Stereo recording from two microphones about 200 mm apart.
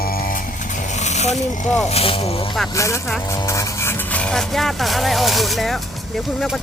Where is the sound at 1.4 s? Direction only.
40° left (ahead or behind).